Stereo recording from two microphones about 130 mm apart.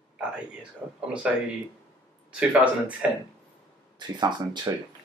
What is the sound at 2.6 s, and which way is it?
Speech, 10° right (ahead or behind).